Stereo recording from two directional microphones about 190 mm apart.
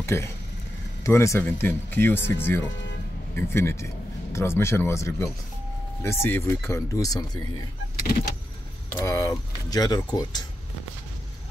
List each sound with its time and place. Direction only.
0.0 s speech: 15° left (ahead or behind)
8.9 s speech: 15° left (ahead or behind)